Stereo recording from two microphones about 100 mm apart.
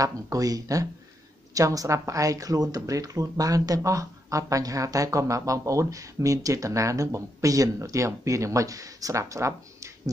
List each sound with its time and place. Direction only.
0.0 s speech: 35° right (ahead or behind)